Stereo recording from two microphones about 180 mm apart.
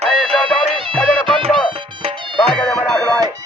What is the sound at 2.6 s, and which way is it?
Music, 10° left (ahead or behind).